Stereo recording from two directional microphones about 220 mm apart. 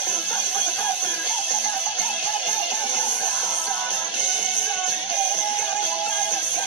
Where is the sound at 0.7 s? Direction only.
10° left (ahead or behind).